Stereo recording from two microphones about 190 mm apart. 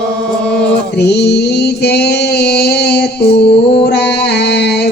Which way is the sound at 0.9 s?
60° left (ahead or behind).